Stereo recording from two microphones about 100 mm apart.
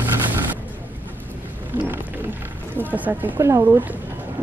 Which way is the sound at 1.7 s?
15° right (ahead or behind).